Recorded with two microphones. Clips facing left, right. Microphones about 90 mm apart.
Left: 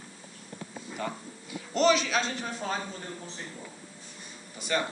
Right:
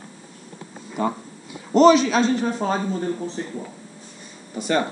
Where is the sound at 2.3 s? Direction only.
40° right (ahead or behind).